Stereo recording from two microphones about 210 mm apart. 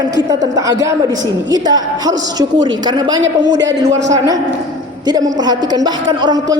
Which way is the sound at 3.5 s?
55° right (ahead or behind).